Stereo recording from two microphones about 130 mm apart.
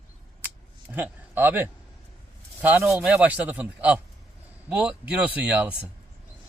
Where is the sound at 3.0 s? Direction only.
10° right (ahead or behind).